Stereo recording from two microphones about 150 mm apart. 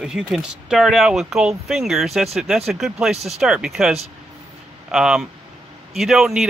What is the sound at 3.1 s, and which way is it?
Speech, 45° right (ahead or behind).